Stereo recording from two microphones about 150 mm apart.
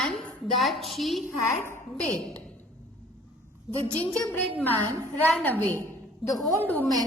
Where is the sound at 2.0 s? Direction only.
5° left (ahead or behind).